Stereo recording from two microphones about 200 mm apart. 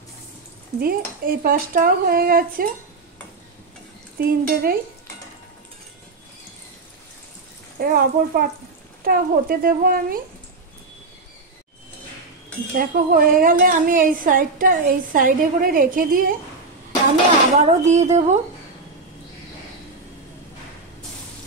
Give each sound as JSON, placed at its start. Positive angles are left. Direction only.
{"t": 0.7, "sound": "a woman's voice", "side_deg": -50}
{"t": 4.2, "sound": "a woman's voice", "side_deg": -50}
{"t": 7.8, "sound": "a woman's voice", "side_deg": -50}
{"t": 12.7, "sound": "a woman's voice", "side_deg": -45}
{"t": 17.6, "sound": "speech", "side_deg": -35}